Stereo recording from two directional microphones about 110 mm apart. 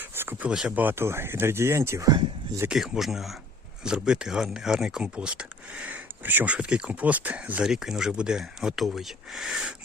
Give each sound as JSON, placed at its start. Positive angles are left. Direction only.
{"t": 0.0, "sound": "a sound", "side_deg": -20}
{"t": 0.5, "sound": "speech", "side_deg": -10}
{"t": 2.6, "sound": "speech", "side_deg": -5}